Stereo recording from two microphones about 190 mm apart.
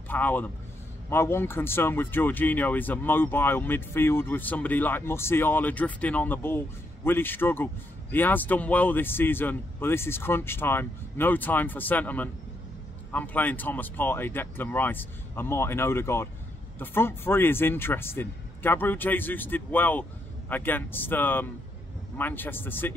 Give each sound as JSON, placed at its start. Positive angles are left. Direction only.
{"t": 0.1, "sound": "speech", "side_deg": 10}